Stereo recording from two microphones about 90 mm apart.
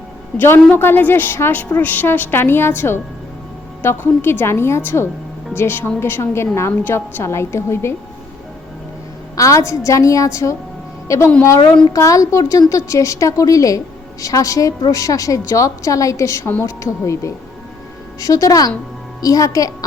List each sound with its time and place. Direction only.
0.3 s a woman's voice: 25° left (ahead or behind)
9.3 s a woman's voice: 40° left (ahead or behind)